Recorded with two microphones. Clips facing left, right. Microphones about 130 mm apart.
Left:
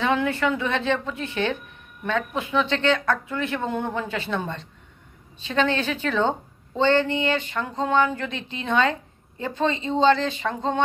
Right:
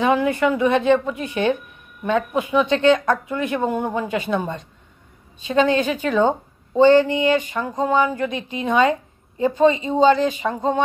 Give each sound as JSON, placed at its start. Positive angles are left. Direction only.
{"t": 0.0, "sound": "speech", "side_deg": -15}